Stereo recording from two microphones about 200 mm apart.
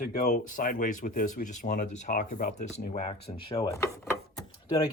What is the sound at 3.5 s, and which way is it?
Speech, 15° left (ahead or behind).